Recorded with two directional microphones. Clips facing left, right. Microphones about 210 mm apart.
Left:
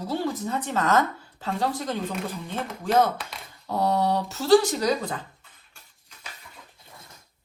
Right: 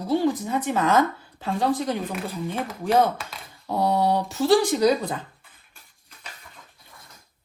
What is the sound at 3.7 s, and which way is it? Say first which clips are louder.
A woman's voice: right 2 dB; 10° right (ahead or behind).